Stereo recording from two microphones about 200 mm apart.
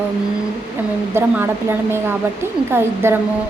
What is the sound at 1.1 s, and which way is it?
A woman's voice, 10° right (ahead or behind).